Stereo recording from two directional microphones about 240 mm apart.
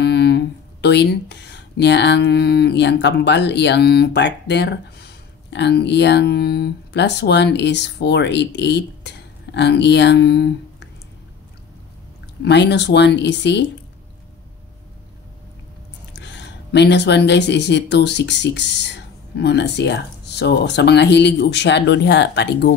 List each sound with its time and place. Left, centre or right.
0.0 s speech: left
12.4 s speech: left
16.2 s speech: left